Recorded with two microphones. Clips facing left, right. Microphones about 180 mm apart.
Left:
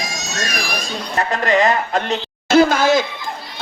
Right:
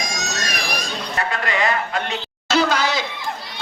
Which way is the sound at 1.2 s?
40° left (ahead or behind).